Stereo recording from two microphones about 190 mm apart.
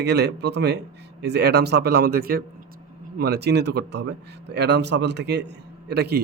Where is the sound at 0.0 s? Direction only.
60° right (ahead or behind).